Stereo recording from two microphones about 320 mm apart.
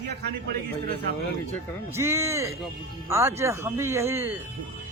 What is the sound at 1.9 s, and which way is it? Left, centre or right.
A man's voice, centre.